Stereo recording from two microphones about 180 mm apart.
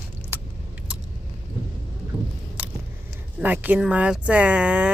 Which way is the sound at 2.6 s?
10° right (ahead or behind).